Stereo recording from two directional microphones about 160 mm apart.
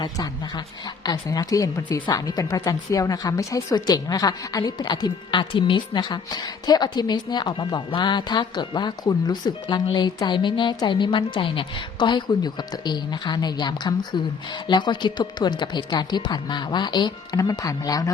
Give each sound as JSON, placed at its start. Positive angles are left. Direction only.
{"t": 0.0, "sound": "a woman's voice", "side_deg": 25}